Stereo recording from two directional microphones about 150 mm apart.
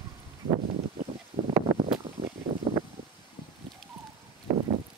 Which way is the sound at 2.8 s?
25° right (ahead or behind).